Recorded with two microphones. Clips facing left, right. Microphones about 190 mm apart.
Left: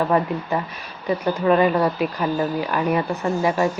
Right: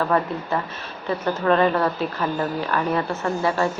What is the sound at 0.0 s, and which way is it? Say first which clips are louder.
A woman's voice: left 2 dB; 15° left (ahead or behind).